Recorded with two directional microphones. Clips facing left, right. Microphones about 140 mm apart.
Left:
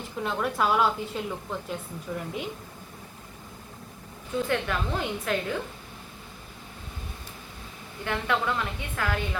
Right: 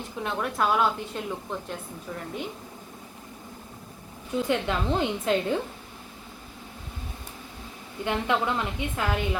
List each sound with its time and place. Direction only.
0.2 s a woman's voice: centre (ahead or behind)
4.3 s a woman's voice: 20° right (ahead or behind)
8.0 s a woman's voice: 20° right (ahead or behind)